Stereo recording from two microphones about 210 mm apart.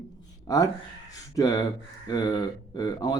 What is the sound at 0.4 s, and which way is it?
Speech, 15° left (ahead or behind).